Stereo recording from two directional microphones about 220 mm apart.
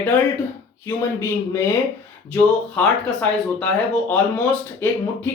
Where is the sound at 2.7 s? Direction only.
5° left (ahead or behind).